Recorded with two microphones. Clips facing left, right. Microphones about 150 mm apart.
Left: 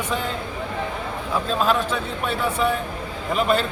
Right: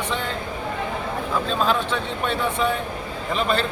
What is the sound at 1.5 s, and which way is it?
Speech, 5° left (ahead or behind).